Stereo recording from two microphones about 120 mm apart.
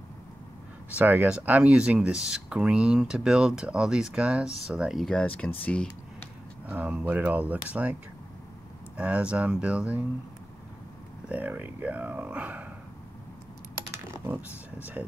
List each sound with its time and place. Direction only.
0.9 s speech: 15° right (ahead or behind)
5.2 s speech: 15° left (ahead or behind)
6.7 s speech: 15° right (ahead or behind)
11.2 s speech: 15° right (ahead or behind)
14.1 s mechanisms: 15° right (ahead or behind)